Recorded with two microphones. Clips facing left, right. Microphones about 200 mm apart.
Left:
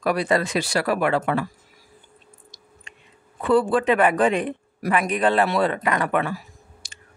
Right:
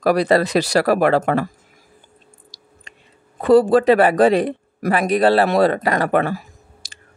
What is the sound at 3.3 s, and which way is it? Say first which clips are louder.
Speech: right 6 dB; 40° right (ahead or behind).